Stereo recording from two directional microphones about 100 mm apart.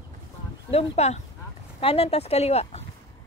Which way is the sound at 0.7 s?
85° left.